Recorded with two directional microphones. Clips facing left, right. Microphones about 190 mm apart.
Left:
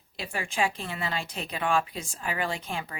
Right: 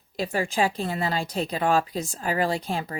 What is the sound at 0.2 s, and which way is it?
Speech, 40° right (ahead or behind).